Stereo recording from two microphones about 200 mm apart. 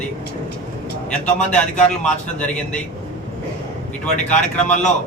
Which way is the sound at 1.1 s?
5° left (ahead or behind).